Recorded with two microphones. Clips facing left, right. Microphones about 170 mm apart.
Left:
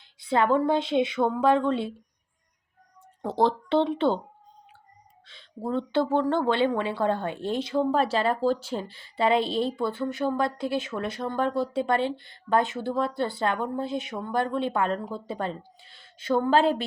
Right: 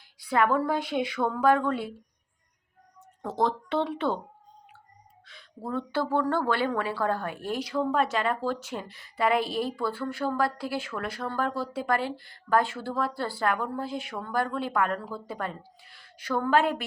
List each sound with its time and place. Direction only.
0.0 s speech: 25° left (ahead or behind)
3.2 s speech: 30° left (ahead or behind)
5.2 s speech: 25° left (ahead or behind)